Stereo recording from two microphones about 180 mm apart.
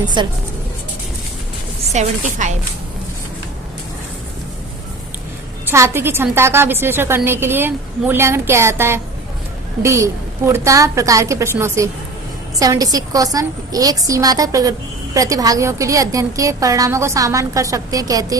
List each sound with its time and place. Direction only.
0.0 s a woman's voice: 25° right (ahead or behind)
1.9 s speech: 40° right (ahead or behind)
5.7 s a woman's voice: 15° right (ahead or behind)